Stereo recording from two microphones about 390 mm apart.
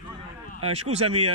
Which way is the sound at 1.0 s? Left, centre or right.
Right.